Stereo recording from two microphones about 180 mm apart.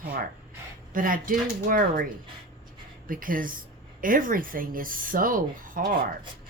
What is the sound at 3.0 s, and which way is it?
Speech, 50° right (ahead or behind).